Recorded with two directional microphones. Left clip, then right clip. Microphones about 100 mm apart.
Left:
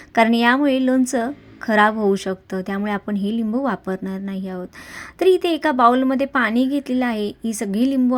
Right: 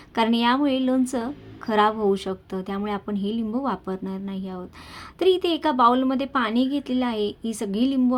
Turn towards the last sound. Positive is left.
turn(degrees=35)  # may be behind; listen again after turning